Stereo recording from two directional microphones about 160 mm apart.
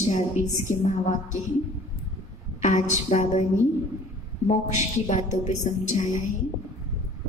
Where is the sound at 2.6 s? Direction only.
45° left (ahead or behind).